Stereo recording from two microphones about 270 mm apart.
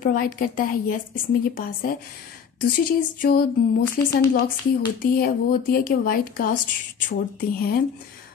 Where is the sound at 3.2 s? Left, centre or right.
Left.